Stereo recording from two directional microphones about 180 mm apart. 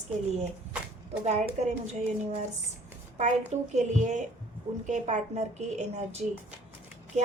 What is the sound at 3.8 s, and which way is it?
A woman's voice, 40° right (ahead or behind).